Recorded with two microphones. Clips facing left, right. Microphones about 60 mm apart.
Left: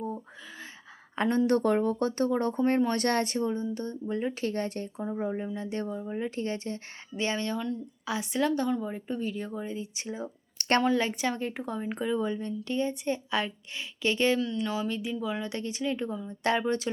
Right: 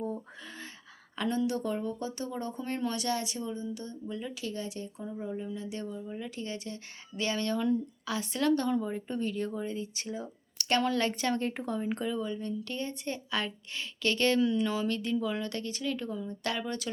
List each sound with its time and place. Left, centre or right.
1.1 s speech: left
1.5 s speech: left
2.6 s speech: left
2.9 s a woman's voice: left; by 11.3 s centre
11.3 s speech: centre
11.6 s speech: centre
12.1 s a woman's voice: left
14.3 s speech: centre
14.7 s speech: centre
16.5 s a woman's voice: left